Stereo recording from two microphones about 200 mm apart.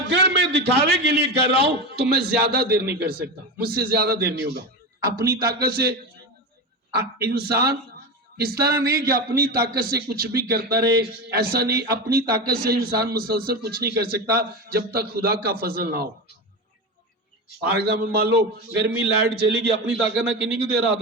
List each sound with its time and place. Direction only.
0.1 s a man's voice: 60° right (ahead or behind)
7.0 s a man's voice: 50° right (ahead or behind)
17.6 s a man's voice: 55° right (ahead or behind)